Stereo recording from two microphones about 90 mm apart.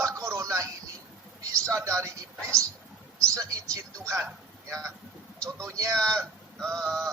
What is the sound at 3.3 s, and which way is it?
Speech, 40° right (ahead or behind).